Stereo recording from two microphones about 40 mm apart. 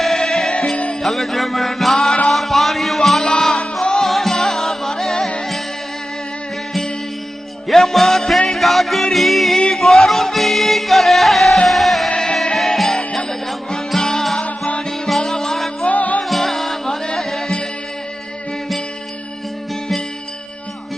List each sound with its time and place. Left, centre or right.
0.0 s music: centre
1.0 s mantra: centre
2.3 s music: centre
3.2 s music: left
4.0 s music: centre
7.7 s music: centre
12.1 s music: left
12.5 s music: centre
15.8 s music: left
16.2 s music: centre